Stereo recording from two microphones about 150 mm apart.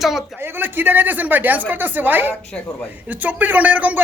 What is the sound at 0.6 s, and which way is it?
A man's voice, 15° right (ahead or behind).